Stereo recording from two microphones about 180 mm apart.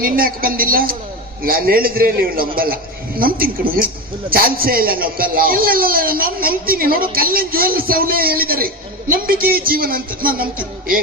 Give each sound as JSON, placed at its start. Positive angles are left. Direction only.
{"t": 0.0, "sound": "a man's voice", "side_deg": -55}